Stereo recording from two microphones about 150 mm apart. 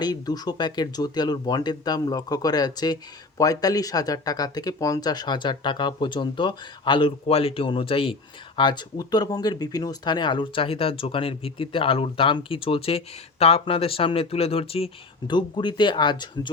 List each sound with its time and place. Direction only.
0.0 s speech: 25° left (ahead or behind)